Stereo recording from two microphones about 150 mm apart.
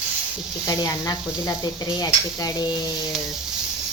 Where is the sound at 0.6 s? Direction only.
25° left (ahead or behind).